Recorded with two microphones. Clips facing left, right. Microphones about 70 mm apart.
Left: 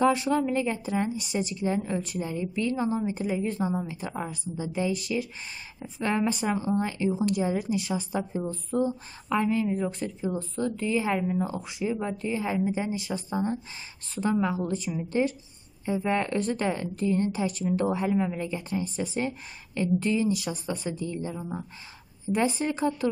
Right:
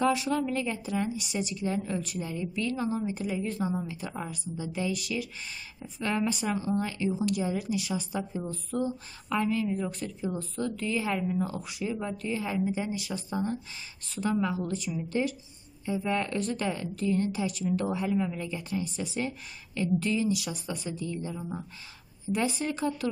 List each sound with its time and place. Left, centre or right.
0.3 s a woman's voice: left